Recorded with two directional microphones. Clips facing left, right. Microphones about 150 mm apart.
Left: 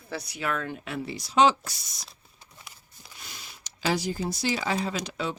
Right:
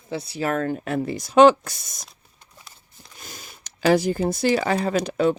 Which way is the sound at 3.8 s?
55° right (ahead or behind).